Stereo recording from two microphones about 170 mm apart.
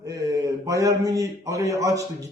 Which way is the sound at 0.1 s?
20° right (ahead or behind).